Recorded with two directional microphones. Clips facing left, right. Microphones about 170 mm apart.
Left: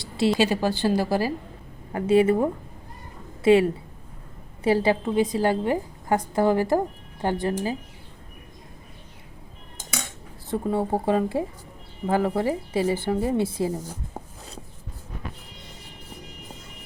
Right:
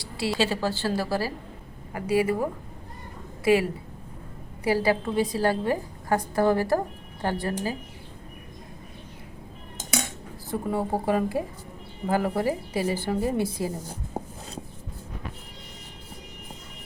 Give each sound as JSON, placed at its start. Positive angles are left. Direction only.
{"t": 0.0, "sound": "a woman's voice", "side_deg": 20}
{"t": 1.9, "sound": "a woman's voice", "side_deg": 25}
{"t": 10.5, "sound": "a woman's voice", "side_deg": 25}
{"t": 14.2, "sound": "a sound", "side_deg": -30}